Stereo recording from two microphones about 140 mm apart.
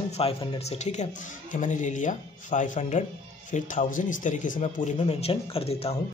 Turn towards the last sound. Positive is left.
turn(degrees=45)  # may be behind; listen again after turning